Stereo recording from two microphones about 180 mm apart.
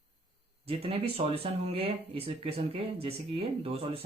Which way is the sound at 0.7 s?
35° right (ahead or behind).